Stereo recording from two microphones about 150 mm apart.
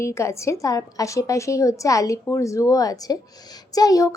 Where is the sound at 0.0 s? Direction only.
20° left (ahead or behind).